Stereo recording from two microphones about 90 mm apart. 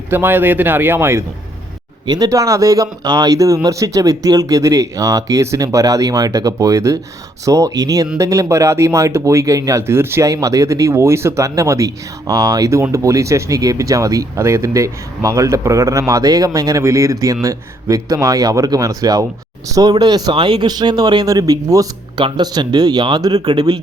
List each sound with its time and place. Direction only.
0.1 s speech: 25° right (ahead or behind)
2.0 s speech: 45° right (ahead or behind)
22.2 s speech: 50° right (ahead or behind)